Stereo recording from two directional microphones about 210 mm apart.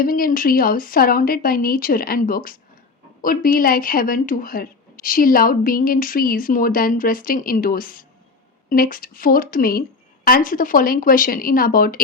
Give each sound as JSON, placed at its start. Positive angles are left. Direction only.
{"t": 0.0, "sound": "speech", "side_deg": 45}